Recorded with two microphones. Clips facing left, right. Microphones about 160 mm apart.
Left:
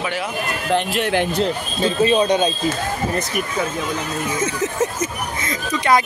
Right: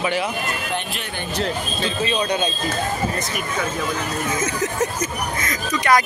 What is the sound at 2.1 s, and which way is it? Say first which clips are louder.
Speech: left 4 dB; 20° left (ahead or behind).